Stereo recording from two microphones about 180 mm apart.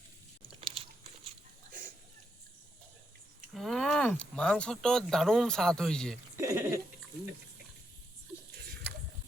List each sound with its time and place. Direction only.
0.4 s crunch: 30° right (ahead or behind)
3.5 s speech: centre (ahead or behind)
6.3 s a sound: 15° right (ahead or behind)